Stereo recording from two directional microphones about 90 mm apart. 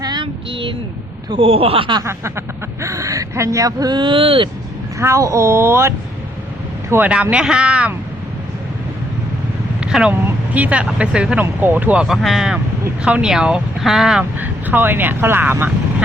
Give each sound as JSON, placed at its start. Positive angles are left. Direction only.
{"t": 0.0, "sound": "a sound", "side_deg": -55}
{"t": 1.4, "sound": "speech", "side_deg": -90}
{"t": 2.0, "sound": "speech", "side_deg": -30}
{"t": 4.9, "sound": "speech", "side_deg": -35}
{"t": 7.1, "sound": "speech", "side_deg": -10}
{"t": 9.8, "sound": "speech", "side_deg": -10}
{"t": 12.0, "sound": "speech", "side_deg": 0}
{"t": 14.3, "sound": "speech", "side_deg": -20}